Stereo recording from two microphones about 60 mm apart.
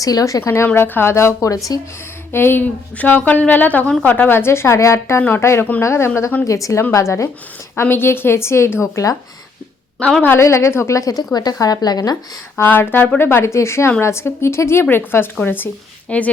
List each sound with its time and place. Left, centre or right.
0.0 s speech: left
0.7 s speech: left
1.1 s speech: left
2.3 s speech: left
3.0 s a woman's voice: left
6.5 s speech: left
7.8 s a woman's voice: left
10.0 s speech: left
10.4 s speech: left
12.6 s speech: left
13.5 s a woman's voice: left
16.0 s speech: left